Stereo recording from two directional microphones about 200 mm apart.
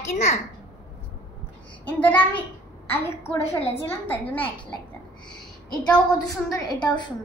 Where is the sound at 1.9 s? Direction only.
10° left (ahead or behind).